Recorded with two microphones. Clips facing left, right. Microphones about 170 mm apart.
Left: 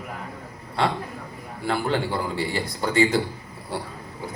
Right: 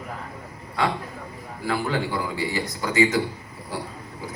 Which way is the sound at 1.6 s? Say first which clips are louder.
Left 1 dB; 30° left (ahead or behind).